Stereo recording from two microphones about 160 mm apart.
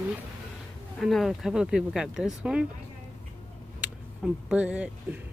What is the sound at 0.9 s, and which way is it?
Speech, centre (ahead or behind).